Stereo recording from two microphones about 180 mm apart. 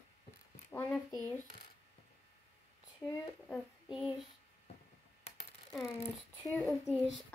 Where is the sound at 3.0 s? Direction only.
15° left (ahead or behind).